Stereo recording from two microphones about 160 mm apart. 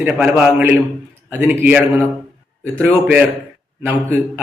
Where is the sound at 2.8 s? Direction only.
10° right (ahead or behind).